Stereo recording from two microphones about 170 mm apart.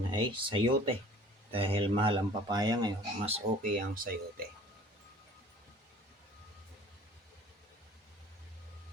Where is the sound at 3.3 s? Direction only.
50° right (ahead or behind).